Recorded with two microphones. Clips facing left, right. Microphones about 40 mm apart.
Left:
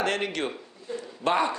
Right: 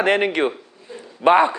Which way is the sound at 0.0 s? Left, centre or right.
Right.